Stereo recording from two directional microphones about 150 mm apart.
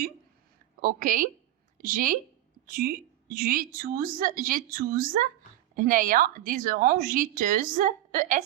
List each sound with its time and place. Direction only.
0.8 s a woman's voice: 70° right (ahead or behind)